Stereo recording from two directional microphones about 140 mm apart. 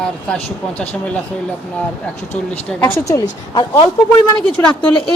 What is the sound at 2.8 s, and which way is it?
Speech, 20° left (ahead or behind).